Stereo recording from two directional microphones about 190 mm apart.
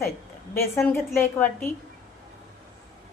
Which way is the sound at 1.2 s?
10° left (ahead or behind).